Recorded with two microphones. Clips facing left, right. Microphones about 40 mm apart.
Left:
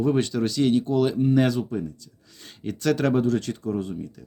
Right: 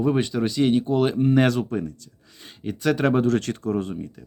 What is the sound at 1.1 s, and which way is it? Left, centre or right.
Speech, right.